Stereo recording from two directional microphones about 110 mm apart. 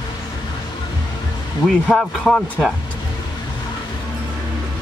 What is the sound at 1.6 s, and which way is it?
Speech, 5° left (ahead or behind).